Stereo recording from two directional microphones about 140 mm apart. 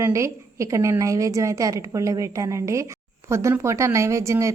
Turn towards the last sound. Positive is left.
turn(degrees=-20)  # may be behind; listen again after turning